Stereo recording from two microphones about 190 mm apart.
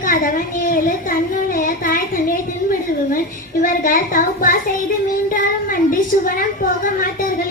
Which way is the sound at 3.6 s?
45° left (ahead or behind).